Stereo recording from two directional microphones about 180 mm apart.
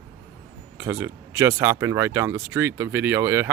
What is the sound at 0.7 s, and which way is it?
Speech, 10° right (ahead or behind).